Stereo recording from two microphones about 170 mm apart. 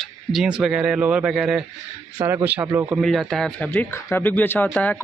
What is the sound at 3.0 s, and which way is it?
Speech, centre (ahead or behind).